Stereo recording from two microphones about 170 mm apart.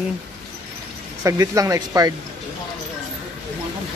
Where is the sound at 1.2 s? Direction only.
20° right (ahead or behind).